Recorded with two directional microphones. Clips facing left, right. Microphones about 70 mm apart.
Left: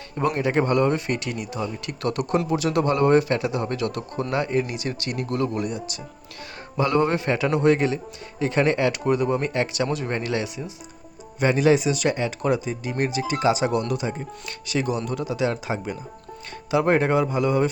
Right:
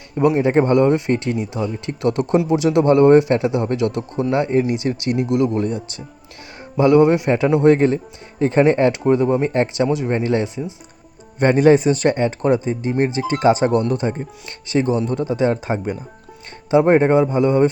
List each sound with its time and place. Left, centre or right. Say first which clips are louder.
0.2 s speech: right 8 dB; centre
0.4 s a man's voice: right 4 dB; right
6.7 s a man's voice: right 8 dB; right
11.3 s speech: right 6 dB; right
16.8 s a man's voice: right 5 dB; right